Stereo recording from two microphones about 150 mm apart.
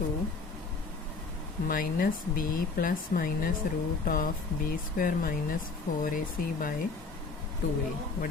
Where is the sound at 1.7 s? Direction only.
70° left (ahead or behind).